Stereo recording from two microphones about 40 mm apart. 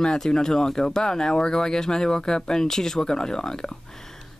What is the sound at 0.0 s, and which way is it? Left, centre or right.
Speech, centre.